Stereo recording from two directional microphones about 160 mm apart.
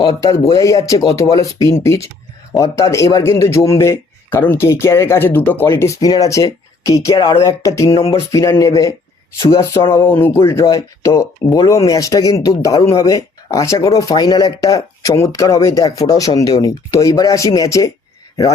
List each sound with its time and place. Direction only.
0.0 s speech: 25° left (ahead or behind)